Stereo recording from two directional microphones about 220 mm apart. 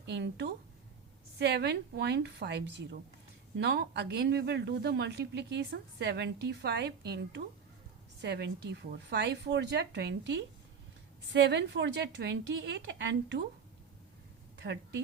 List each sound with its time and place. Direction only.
0.0 s speech: 50° right (ahead or behind)
14.6 s a woman's voice: 55° right (ahead or behind)